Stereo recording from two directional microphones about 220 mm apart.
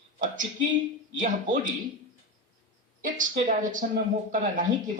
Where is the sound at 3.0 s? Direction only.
35° right (ahead or behind).